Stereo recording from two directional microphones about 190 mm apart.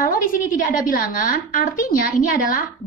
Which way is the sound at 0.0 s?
45° left (ahead or behind).